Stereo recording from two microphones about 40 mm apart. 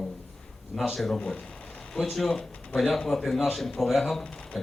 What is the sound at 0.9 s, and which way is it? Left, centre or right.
Speech, centre.